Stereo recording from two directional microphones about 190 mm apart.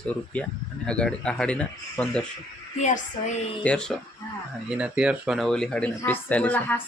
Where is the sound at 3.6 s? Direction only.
5° left (ahead or behind).